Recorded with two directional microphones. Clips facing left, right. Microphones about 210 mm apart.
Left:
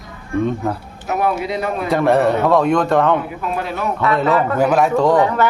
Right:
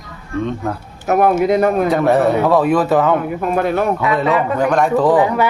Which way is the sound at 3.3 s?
50° right (ahead or behind).